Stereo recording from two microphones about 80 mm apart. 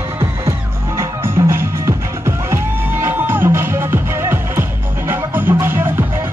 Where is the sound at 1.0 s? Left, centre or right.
Right.